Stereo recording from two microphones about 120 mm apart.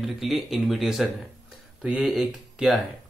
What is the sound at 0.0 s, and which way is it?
Speech, centre (ahead or behind).